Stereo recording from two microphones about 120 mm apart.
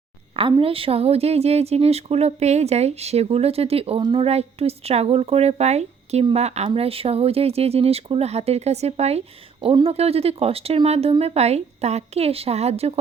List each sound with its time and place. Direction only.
0.6 s speech: 50° right (ahead or behind)